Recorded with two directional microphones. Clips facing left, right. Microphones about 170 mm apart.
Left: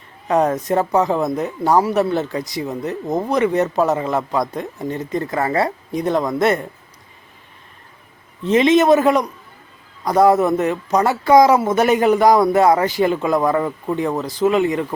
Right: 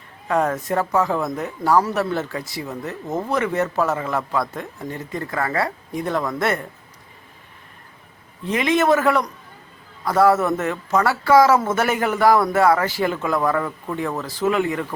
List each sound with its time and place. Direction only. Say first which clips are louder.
0.3 s speech: left 4 dB; 20° left (ahead or behind)
8.4 s speech: left 5 dB; 25° left (ahead or behind)